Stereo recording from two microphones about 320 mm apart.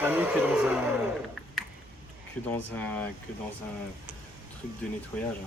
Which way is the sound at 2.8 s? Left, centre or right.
Centre.